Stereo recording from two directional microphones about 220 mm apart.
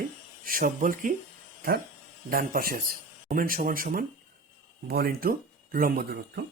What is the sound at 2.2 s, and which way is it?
Speech, 40° right (ahead or behind).